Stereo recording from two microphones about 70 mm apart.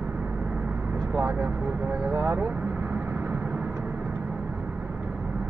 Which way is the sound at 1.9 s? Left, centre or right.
Right.